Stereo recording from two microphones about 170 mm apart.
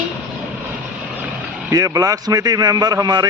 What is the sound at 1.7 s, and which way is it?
A man's voice, 20° right (ahead or behind).